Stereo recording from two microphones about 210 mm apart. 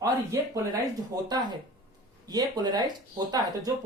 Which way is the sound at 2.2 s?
20° right (ahead or behind).